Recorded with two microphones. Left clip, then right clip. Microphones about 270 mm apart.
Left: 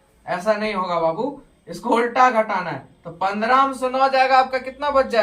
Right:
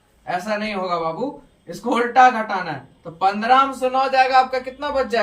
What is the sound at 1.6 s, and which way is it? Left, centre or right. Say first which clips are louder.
Speech: left 1 dB; centre.